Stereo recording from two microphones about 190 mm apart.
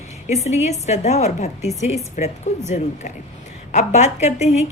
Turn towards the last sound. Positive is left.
turn(degrees=35)  # may be behind; listen again after turning